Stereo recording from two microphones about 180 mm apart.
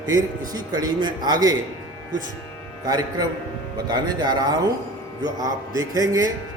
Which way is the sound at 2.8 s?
20° right (ahead or behind).